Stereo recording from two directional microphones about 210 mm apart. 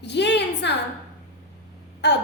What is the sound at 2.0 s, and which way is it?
Speech, 55° left (ahead or behind).